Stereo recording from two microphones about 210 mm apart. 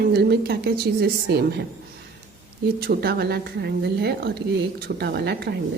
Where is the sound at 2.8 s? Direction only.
45° right (ahead or behind).